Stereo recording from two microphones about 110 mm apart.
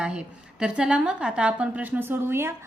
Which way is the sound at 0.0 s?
10° right (ahead or behind).